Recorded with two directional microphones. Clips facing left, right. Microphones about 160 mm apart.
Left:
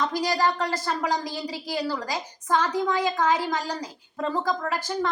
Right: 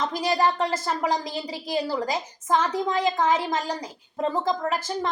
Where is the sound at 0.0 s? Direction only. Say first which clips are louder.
Right 1 dB; 25° right (ahead or behind).